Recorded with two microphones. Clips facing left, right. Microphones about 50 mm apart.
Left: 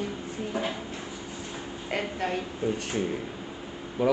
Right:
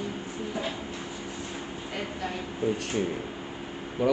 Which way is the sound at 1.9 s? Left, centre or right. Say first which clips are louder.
Left 5 dB; left.